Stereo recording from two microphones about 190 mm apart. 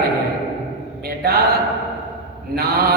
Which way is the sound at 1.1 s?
55° right (ahead or behind).